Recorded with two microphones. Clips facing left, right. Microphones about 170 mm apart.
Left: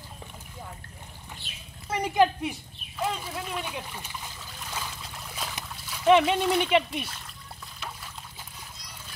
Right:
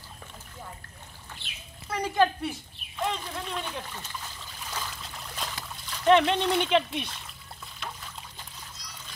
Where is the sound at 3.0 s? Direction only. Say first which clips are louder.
Left 1 dB; 5° left (ahead or behind).